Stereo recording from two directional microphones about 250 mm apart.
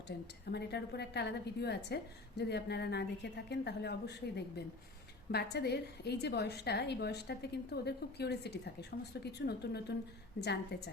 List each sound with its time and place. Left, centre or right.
0.1 s a woman's voice: left